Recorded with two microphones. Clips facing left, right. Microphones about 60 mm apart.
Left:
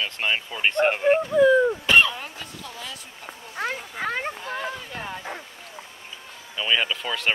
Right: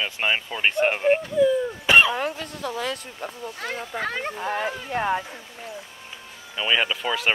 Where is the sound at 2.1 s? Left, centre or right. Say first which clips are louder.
Right 9 dB; right.